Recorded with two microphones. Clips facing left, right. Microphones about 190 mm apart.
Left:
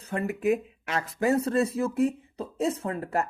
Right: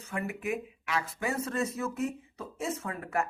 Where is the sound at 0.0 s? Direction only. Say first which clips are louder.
Left 7 dB; 35° left (ahead or behind).